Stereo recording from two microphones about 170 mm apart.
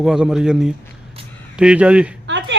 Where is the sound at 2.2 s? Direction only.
90° right.